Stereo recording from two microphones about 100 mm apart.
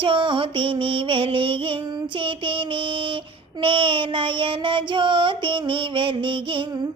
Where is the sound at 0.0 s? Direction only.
55° right (ahead or behind).